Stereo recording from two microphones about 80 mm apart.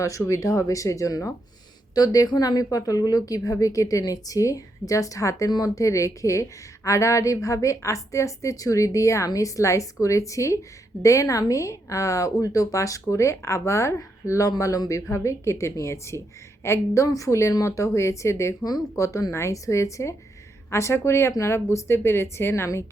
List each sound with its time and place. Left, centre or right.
0.0 s a woman's voice: left
2.0 s a woman's voice: left